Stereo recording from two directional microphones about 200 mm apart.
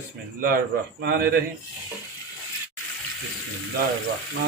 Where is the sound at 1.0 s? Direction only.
50° right (ahead or behind).